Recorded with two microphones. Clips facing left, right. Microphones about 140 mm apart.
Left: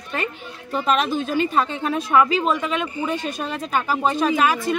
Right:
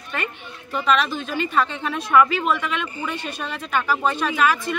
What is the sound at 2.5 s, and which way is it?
Speech, 40° left (ahead or behind).